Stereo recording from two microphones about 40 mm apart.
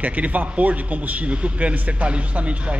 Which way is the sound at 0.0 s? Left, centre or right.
Right.